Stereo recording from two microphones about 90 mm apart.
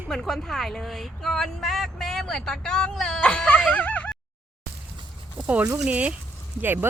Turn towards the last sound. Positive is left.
turn(degrees=-20)  # may be behind; listen again after turning